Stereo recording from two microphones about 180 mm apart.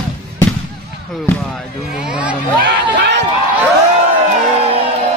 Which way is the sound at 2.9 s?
75° right (ahead or behind).